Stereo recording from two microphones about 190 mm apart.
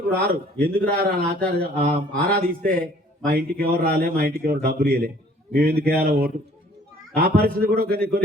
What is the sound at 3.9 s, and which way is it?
A man's voice, 50° right (ahead or behind).